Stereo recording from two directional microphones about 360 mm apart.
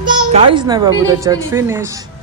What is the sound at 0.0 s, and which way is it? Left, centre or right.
Speech, centre.